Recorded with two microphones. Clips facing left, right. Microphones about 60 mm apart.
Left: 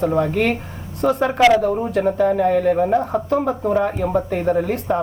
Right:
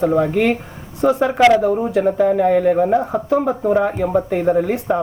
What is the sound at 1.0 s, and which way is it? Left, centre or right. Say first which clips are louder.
Speech: right 2 dB; centre.